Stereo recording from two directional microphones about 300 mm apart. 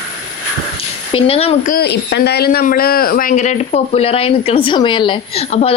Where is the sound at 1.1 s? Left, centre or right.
Centre.